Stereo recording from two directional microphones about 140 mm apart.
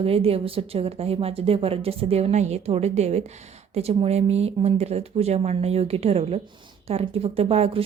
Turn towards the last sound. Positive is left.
turn(degrees=-45)  # may be behind; listen again after turning